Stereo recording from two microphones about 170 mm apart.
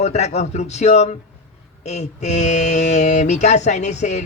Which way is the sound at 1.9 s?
40° left (ahead or behind).